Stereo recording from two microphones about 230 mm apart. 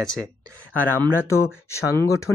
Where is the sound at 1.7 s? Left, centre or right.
Centre.